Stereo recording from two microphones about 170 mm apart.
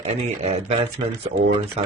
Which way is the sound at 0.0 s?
40° right (ahead or behind).